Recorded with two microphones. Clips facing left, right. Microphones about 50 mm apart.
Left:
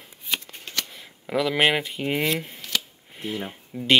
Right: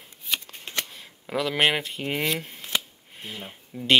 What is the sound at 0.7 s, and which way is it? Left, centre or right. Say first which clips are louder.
Shuffling cards: even; right.